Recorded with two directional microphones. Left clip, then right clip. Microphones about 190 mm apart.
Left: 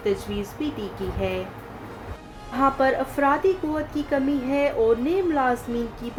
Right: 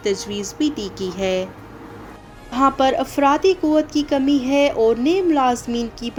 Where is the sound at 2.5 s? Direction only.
40° right (ahead or behind).